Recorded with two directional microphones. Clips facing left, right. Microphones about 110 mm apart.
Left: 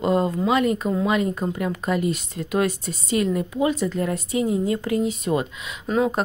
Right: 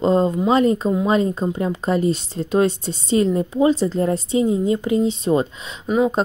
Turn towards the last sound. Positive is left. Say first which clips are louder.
# right 3 dB
turn(degrees=-10)  # may be behind; listen again after turning